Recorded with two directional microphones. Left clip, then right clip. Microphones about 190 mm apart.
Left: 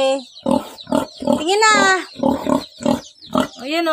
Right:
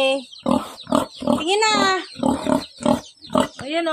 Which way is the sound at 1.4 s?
20° left (ahead or behind).